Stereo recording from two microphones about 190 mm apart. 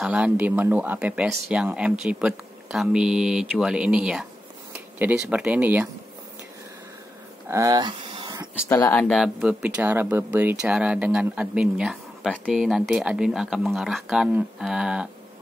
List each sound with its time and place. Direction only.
0.0 s speech: 5° right (ahead or behind)
7.4 s a sound: 15° right (ahead or behind)
8.6 s speech: 15° left (ahead or behind)
9.2 s speech: 5° right (ahead or behind)